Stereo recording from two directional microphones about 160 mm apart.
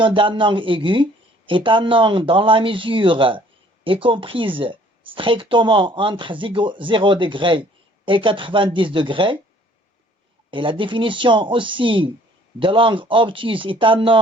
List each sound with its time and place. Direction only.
0.0 s speech: 30° right (ahead or behind)
10.5 s speech: 30° right (ahead or behind)